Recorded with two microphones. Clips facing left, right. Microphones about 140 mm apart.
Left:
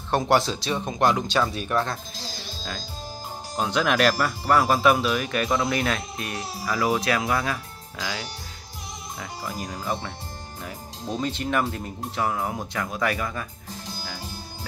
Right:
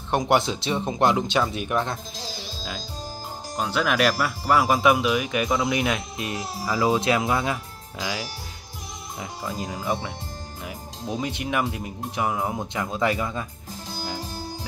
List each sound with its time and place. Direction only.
0.1 s speech: 20° right (ahead or behind)
3.5 s speech: centre (ahead or behind); by 8.3 s 20° right (ahead or behind)
9.7 s speech: 15° right (ahead or behind)